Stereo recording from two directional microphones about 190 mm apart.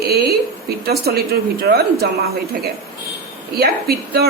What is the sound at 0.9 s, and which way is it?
Speech, 55° right (ahead or behind).